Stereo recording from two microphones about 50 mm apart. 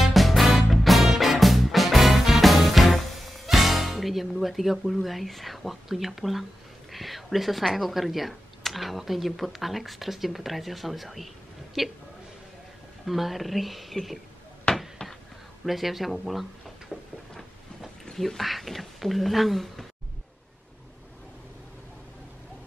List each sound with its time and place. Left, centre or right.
0.0 s music: centre
6.9 s speech: centre
13.0 s speech: centre
14.7 s basketball bounce: centre
15.6 s a sound: centre
18.1 s speech: centre